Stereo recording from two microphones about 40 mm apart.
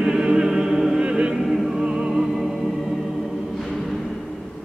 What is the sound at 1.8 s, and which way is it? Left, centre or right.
Music, centre.